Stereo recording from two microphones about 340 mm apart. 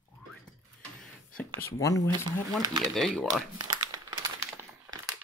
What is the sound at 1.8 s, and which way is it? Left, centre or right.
Speech, centre.